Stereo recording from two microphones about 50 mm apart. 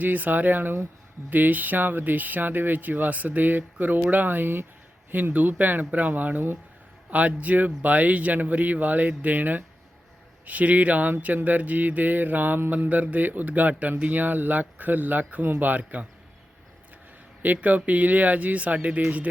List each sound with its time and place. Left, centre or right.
0.0 s speech: right
7.1 s speech: right
17.4 s speech: right